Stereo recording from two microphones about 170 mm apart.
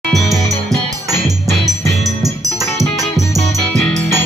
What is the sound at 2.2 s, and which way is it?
Music, 20° right (ahead or behind).